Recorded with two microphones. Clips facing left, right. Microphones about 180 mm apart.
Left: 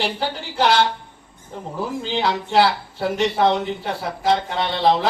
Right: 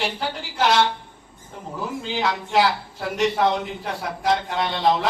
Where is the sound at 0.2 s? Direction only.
30° left (ahead or behind).